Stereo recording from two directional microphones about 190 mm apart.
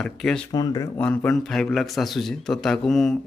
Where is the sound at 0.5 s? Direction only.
20° left (ahead or behind).